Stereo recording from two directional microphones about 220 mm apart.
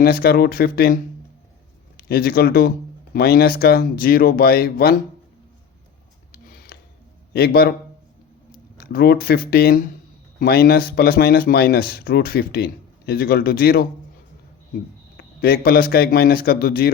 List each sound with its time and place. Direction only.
0.0 s speech: 45° left (ahead or behind)
2.0 s speech: 45° left (ahead or behind)
6.3 s a sound: 45° left (ahead or behind)
7.3 s speech: 45° left (ahead or behind)
15.2 s speech: 45° left (ahead or behind)